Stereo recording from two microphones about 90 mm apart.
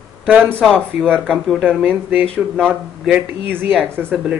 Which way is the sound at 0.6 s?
5° left (ahead or behind).